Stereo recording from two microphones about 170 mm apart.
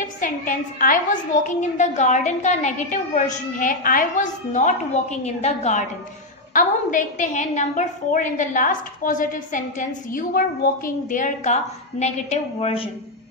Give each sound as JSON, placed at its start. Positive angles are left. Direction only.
{"t": 0.2, "sound": "a woman's voice", "side_deg": 50}